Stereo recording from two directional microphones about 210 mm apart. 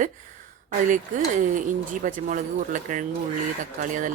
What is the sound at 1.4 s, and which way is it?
A woman's voice, 40° right (ahead or behind).